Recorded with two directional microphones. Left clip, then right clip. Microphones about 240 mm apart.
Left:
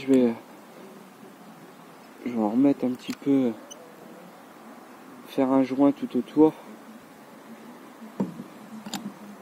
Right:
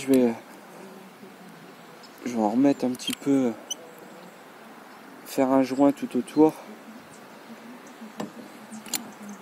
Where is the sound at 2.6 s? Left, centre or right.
Centre.